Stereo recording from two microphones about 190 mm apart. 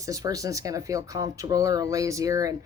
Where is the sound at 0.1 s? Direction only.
20° right (ahead or behind).